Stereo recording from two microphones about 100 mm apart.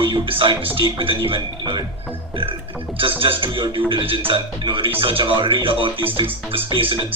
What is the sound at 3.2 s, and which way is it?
Speech, 60° right (ahead or behind).